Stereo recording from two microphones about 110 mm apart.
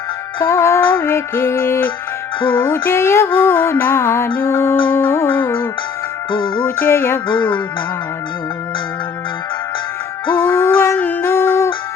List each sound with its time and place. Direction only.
0.4 s music: 25° left (ahead or behind)
6.3 s music: 45° left (ahead or behind)
6.6 s music: 15° left (ahead or behind)
10.4 s howl: 20° left (ahead or behind)